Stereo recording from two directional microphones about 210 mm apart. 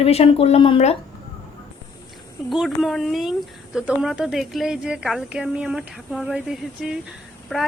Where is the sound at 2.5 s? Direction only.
Centre (ahead or behind).